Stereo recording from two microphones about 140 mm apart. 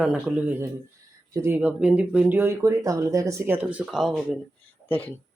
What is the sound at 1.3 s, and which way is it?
Speech, 20° right (ahead or behind).